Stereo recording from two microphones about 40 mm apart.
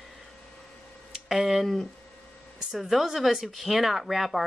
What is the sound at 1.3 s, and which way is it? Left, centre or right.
Speech, centre.